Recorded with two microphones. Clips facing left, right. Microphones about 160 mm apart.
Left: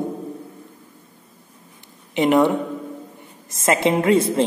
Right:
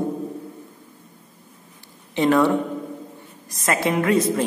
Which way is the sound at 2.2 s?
20° left (ahead or behind).